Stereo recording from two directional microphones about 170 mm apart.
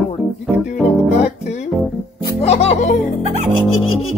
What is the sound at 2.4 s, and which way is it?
Speech, 40° left (ahead or behind).